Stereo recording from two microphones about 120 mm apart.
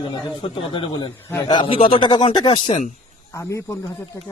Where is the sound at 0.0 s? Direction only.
45° left (ahead or behind).